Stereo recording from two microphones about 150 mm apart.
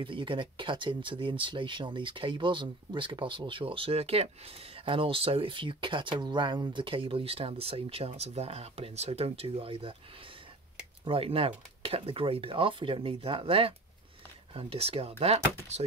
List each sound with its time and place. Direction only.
0.0 s speech: 35° right (ahead or behind)
11.1 s speech: 40° right (ahead or behind)